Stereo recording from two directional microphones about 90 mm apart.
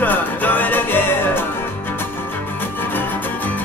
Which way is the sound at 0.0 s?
20° left (ahead or behind).